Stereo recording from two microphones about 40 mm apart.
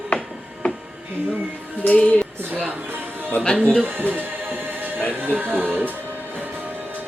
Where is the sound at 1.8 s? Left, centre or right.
Left.